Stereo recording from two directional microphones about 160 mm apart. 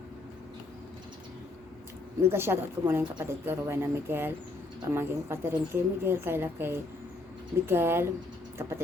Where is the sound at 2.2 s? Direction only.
15° right (ahead or behind).